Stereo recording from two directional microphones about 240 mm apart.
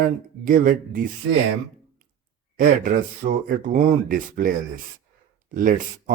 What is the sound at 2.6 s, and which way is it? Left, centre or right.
Speech, right.